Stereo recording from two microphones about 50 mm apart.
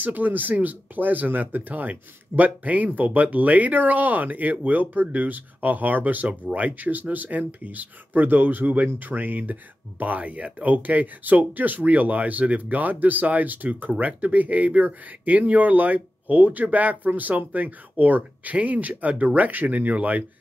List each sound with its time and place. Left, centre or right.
0.0 s speech: right